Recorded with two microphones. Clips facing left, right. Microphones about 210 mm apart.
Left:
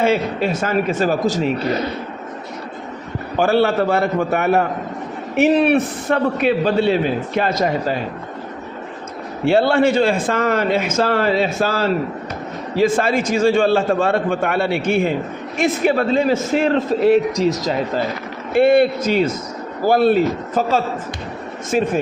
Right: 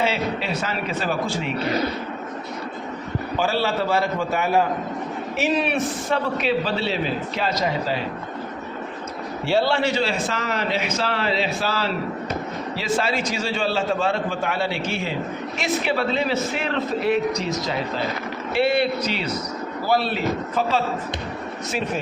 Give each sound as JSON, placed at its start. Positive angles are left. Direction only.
{"t": 0.0, "sound": "a man's voice", "side_deg": 50}
{"t": 3.3, "sound": "a man's voice", "side_deg": 55}
{"t": 9.5, "sound": "a man's voice", "side_deg": 55}